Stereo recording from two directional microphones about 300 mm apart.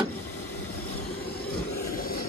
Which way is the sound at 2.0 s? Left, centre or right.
Left.